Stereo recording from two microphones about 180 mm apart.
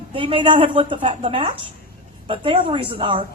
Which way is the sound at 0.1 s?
30° right (ahead or behind).